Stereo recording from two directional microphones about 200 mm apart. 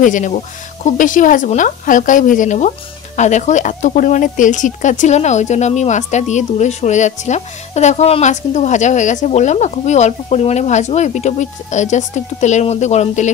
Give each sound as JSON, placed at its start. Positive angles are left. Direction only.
{"t": 0.0, "sound": "speech", "side_deg": 40}